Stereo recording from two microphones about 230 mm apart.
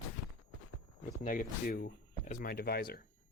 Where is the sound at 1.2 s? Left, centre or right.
Left.